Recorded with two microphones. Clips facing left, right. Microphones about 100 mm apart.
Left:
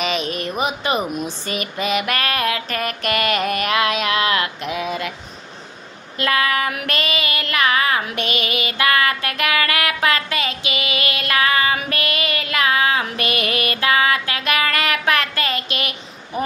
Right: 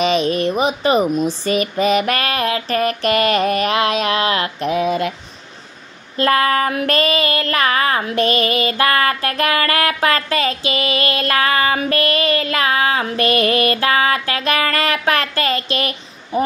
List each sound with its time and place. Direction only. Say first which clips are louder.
0.0 s child singing: right 7 dB; 35° right (ahead or behind)
6.1 s child singing: right 4 dB; 35° right (ahead or behind)